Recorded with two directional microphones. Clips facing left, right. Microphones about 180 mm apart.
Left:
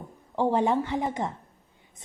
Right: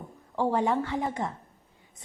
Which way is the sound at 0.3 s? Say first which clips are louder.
Left 2 dB; 20° left (ahead or behind).